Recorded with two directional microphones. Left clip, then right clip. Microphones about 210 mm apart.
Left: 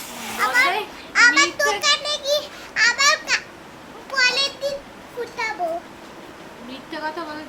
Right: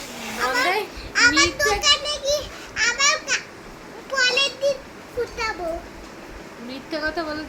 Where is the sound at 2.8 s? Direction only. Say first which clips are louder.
Left 3 dB; 15° left (ahead or behind).